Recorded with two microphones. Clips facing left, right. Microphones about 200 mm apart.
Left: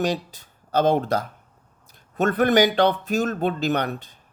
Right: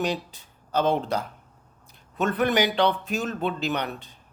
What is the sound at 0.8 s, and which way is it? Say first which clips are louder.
A man's voice: left 4 dB; 40° left (ahead or behind).